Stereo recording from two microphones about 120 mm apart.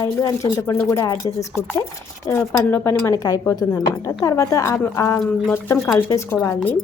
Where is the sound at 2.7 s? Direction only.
20° left (ahead or behind).